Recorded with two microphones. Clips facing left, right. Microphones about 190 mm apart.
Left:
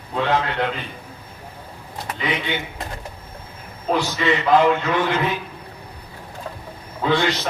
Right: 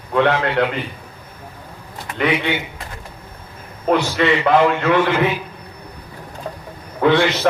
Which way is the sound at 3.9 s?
70° right (ahead or behind).